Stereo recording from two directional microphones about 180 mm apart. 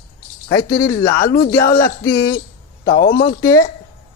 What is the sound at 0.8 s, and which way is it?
A man's voice, 15° left (ahead or behind).